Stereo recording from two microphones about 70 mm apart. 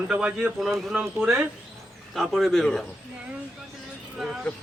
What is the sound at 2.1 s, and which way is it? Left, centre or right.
Speech, centre.